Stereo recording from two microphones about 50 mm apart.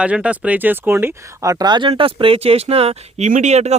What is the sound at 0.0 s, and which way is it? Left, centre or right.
Speech, right.